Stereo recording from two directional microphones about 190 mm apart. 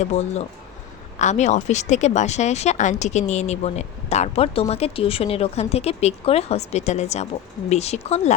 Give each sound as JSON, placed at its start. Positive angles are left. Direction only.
{"t": 0.0, "sound": "speech", "side_deg": 35}